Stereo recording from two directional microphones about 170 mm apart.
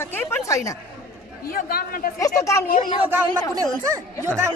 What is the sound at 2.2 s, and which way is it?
Speech, 20° left (ahead or behind).